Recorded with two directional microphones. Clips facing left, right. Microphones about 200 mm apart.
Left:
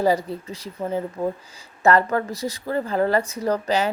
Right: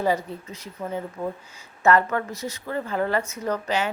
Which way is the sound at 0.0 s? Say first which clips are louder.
Left 4 dB; 35° left (ahead or behind).